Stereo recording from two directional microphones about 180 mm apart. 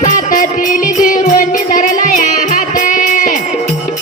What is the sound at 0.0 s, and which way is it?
Music, 45° left (ahead or behind).